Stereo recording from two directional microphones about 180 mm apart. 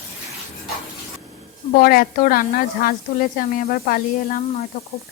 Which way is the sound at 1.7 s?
55° left (ahead or behind).